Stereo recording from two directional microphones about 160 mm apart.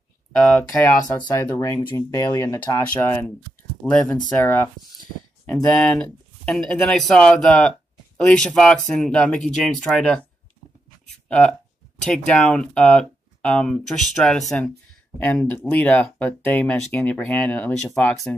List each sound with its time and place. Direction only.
0.7 s speech: 20° left (ahead or behind)
11.2 s speech: 5° left (ahead or behind)